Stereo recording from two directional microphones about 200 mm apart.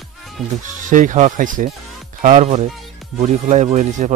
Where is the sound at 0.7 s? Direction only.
40° right (ahead or behind).